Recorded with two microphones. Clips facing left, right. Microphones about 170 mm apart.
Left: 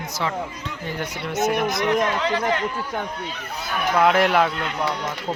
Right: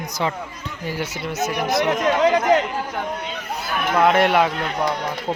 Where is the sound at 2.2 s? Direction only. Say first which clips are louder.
Right 7 dB; 45° right (ahead or behind).